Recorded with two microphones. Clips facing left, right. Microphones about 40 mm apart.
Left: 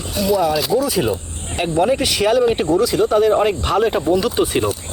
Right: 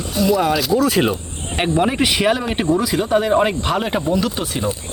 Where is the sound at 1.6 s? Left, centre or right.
Right; by 4.0 s centre.